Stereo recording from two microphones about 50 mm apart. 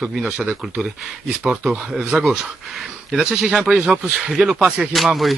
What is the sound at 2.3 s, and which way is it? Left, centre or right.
Speech, centre.